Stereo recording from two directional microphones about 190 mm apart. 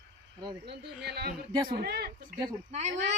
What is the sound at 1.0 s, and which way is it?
Speech, 55° right (ahead or behind).